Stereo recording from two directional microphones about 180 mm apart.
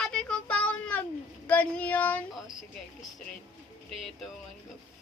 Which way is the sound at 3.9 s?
Centre (ahead or behind).